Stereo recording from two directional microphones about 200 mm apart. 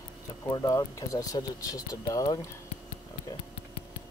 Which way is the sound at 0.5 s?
20° left (ahead or behind).